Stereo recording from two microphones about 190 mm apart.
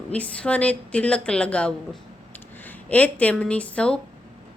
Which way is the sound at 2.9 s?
10° left (ahead or behind).